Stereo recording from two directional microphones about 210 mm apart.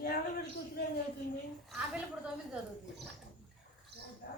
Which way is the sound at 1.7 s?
5° right (ahead or behind).